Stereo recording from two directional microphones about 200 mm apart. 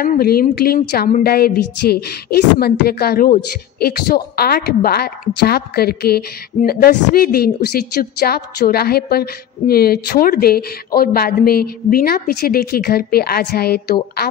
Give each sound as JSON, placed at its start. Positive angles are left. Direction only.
{"t": 0.0, "sound": "a woman's voice", "side_deg": 50}